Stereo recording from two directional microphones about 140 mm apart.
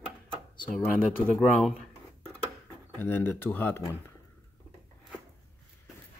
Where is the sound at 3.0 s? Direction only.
15° left (ahead or behind).